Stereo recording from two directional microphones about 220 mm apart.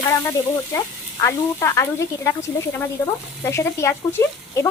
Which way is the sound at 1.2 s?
10° left (ahead or behind).